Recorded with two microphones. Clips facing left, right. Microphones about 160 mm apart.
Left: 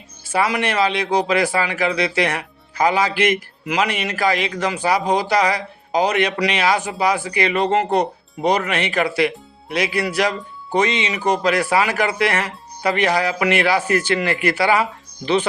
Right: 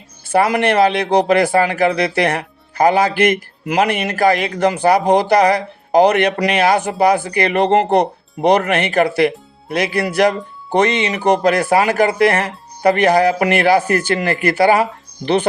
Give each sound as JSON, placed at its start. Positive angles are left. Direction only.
{"t": 0.3, "sound": "speech", "side_deg": -55}